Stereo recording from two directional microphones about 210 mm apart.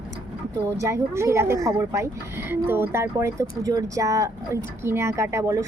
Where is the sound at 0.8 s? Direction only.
15° right (ahead or behind).